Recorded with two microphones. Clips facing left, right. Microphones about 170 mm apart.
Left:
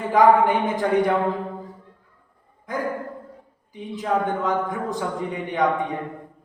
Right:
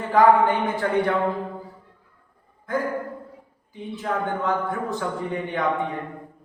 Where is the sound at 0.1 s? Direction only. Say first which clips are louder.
Left 1 dB; 15° left (ahead or behind).